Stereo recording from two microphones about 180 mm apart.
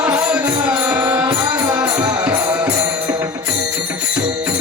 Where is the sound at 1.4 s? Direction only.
20° right (ahead or behind).